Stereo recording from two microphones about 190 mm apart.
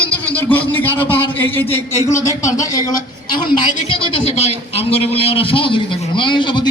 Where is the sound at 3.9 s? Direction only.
25° left (ahead or behind).